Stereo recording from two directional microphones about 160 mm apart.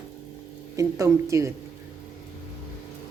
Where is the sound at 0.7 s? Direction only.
20° right (ahead or behind).